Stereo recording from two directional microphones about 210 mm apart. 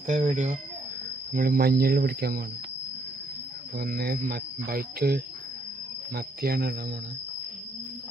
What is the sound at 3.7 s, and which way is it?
Cricket, 45° right (ahead or behind).